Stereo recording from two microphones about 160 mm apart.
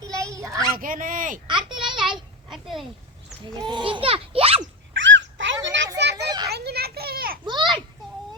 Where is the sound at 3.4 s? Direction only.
30° right (ahead or behind).